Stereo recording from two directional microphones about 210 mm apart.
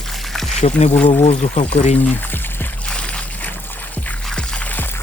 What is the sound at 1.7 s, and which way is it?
Speech, 35° left (ahead or behind).